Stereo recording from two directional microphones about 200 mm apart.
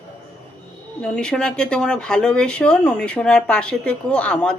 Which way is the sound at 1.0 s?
5° left (ahead or behind).